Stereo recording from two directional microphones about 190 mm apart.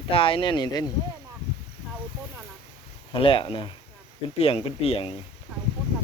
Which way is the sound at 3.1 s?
30° left (ahead or behind).